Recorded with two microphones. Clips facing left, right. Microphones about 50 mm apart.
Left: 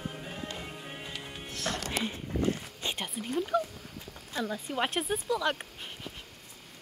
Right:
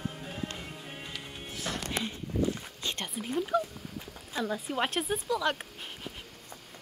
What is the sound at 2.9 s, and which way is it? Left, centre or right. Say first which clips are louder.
Whispering: even; centre.